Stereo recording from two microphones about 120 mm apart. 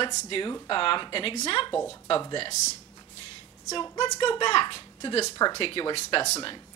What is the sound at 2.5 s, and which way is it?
Speech, 70° left (ahead or behind).